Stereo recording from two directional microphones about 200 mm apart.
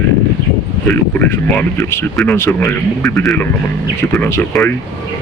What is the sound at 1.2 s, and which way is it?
A man's voice, 10° left (ahead or behind).